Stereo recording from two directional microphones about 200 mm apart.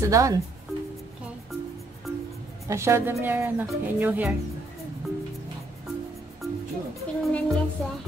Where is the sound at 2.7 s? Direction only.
15° right (ahead or behind).